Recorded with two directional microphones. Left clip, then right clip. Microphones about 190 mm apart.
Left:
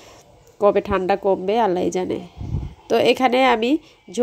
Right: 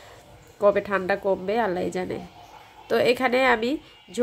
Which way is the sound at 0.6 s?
25° left (ahead or behind).